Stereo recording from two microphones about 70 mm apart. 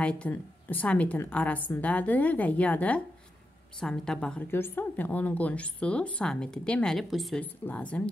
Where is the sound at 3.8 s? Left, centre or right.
Centre.